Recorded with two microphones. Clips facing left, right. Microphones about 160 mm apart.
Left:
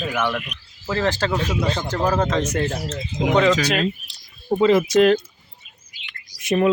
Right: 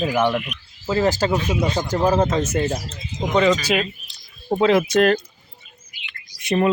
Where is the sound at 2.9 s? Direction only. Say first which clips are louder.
Left 4 dB; 75° left (ahead or behind).